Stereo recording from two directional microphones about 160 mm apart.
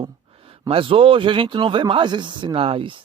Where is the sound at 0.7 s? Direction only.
35° right (ahead or behind).